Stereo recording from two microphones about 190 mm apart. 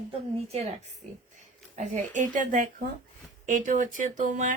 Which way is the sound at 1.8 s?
40° right (ahead or behind).